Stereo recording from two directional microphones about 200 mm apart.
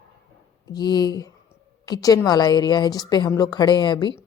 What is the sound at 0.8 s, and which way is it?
A woman's voice, 20° left (ahead or behind).